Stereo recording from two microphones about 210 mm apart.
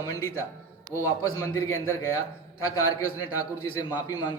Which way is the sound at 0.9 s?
15° left (ahead or behind).